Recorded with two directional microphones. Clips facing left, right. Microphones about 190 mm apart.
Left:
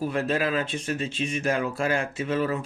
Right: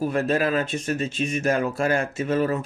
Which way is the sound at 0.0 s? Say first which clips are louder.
Right 3 dB; 45° right (ahead or behind).